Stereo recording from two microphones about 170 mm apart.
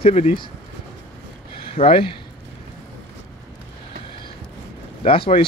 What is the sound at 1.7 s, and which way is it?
Speech, 35° left (ahead or behind).